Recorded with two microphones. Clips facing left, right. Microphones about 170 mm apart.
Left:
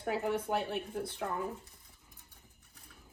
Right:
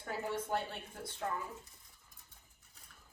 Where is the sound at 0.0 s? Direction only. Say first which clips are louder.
Left 6 dB; 65° left (ahead or behind).